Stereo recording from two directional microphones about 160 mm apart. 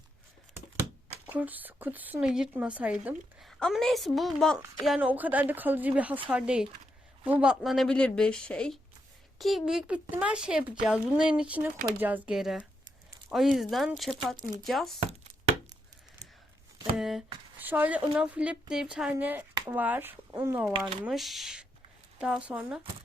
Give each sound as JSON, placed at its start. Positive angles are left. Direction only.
{"t": 1.3, "sound": "a woman's voice", "side_deg": -10}
{"t": 3.6, "sound": "a woman's voice", "side_deg": 0}
{"t": 17.0, "sound": "a woman's voice", "side_deg": 0}
{"t": 21.0, "sound": "a woman's voice", "side_deg": 0}